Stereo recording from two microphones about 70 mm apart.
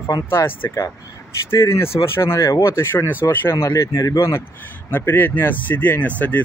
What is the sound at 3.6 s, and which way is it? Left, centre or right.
Speech, left.